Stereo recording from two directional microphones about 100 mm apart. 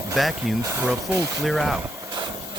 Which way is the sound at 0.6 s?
25° right (ahead or behind).